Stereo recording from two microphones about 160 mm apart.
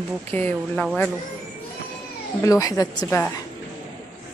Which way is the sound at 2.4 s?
20° left (ahead or behind).